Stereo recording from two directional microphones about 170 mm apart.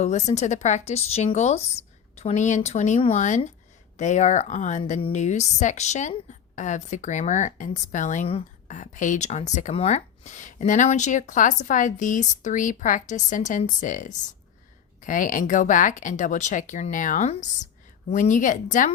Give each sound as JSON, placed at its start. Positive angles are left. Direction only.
{"t": 0.0, "sound": "a woman's voice", "side_deg": 45}